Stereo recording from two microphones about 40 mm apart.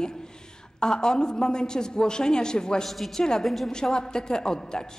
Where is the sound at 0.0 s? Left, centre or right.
Centre.